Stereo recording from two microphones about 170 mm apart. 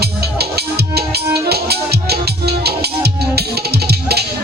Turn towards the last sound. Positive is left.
turn(degrees=-70)  # may be behind; listen again after turning